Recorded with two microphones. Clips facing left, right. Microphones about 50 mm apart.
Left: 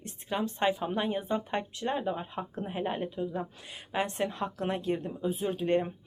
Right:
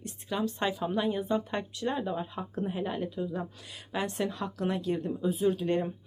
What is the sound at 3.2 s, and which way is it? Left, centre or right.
Speech, centre.